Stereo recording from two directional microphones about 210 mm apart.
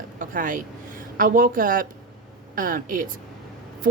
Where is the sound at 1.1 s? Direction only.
40° right (ahead or behind).